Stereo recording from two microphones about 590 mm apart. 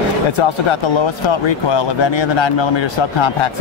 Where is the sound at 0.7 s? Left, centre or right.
Left.